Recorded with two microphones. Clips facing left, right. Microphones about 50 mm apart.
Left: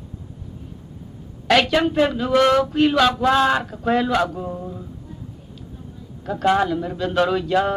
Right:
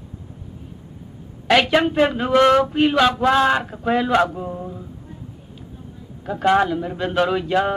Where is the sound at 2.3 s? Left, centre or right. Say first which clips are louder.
Right 2 dB; right.